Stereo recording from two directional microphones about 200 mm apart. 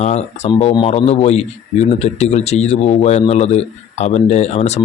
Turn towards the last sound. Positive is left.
turn(degrees=35)  # may be behind; listen again after turning